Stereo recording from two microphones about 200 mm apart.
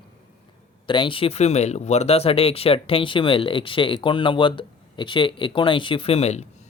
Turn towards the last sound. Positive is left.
turn(degrees=30)  # may be behind; listen again after turning